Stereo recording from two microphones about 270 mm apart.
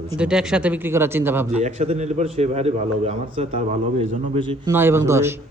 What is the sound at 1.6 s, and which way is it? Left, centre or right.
A man's voice, right.